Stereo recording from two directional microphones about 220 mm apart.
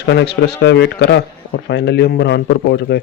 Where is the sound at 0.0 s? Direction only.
50° left (ahead or behind).